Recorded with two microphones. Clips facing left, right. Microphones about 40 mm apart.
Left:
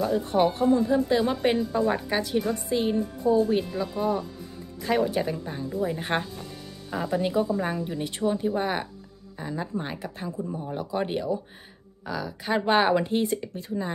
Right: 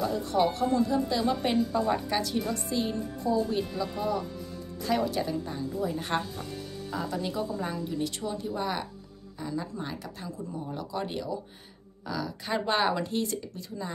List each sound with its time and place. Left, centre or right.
0.1 s speech: left; by 2.5 s centre
2.5 s speech: left
12.1 s speech: centre